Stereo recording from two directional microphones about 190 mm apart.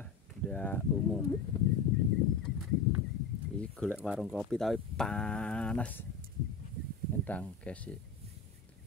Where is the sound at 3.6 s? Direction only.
5° left (ahead or behind).